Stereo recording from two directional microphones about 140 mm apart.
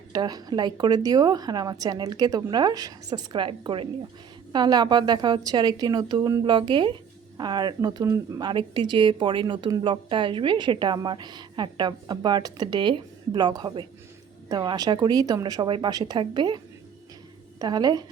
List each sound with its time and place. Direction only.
0.1 s speech: 30° right (ahead or behind)
17.6 s speech: 30° right (ahead or behind)